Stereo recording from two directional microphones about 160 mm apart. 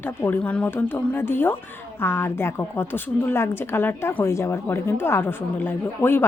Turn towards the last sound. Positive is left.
turn(degrees=15)  # may be behind; listen again after turning